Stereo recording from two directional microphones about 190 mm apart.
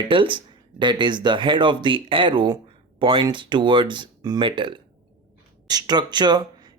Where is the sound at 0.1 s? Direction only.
25° right (ahead or behind).